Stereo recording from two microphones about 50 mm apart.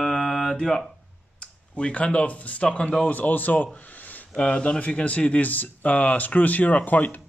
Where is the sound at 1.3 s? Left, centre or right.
Left.